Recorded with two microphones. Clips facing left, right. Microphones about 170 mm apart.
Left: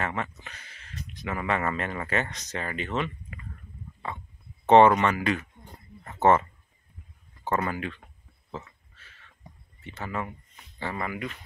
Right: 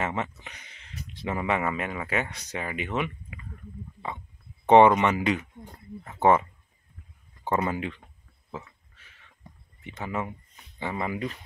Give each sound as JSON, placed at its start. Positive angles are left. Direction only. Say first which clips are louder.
{"t": 0.0, "sound": "speech", "louder": "right 1 dB", "side_deg": -20}
{"t": 1.4, "sound": "speech", "louder": "even", "side_deg": -15}
{"t": 4.6, "sound": "speech", "louder": "even", "side_deg": -15}
{"t": 7.4, "sound": "speech", "louder": "right 1 dB", "side_deg": -15}
{"t": 8.5, "sound": "a sound", "louder": "even", "side_deg": -10}
{"t": 9.5, "sound": "a sound", "louder": "even", "side_deg": 15}
{"t": 9.8, "sound": "speech", "louder": "right 1 dB", "side_deg": -15}